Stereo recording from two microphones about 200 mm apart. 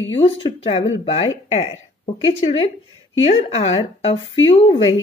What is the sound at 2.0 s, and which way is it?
A woman's voice, 30° left (ahead or behind).